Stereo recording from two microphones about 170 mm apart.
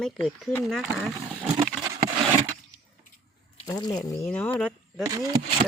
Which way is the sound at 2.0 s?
60° right (ahead or behind).